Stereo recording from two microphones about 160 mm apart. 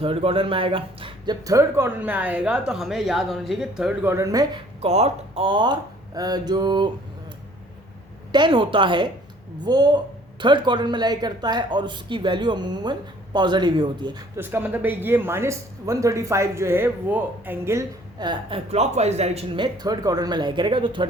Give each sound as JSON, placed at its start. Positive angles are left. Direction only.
{"t": 0.0, "sound": "speech", "side_deg": -35}
{"t": 4.0, "sound": "speech", "side_deg": -20}
{"t": 4.8, "sound": "speech", "side_deg": -40}
{"t": 8.3, "sound": "speech", "side_deg": -30}
{"t": 14.3, "sound": "speech", "side_deg": -15}